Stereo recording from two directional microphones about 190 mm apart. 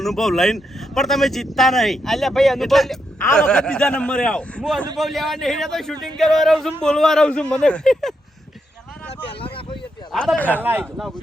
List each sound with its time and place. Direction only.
0.0 s speech: centre (ahead or behind)
9.4 s a sound: 25° left (ahead or behind)
10.1 s speech: 5° left (ahead or behind)
10.6 s speech: 10° right (ahead or behind)
10.9 s speech: centre (ahead or behind)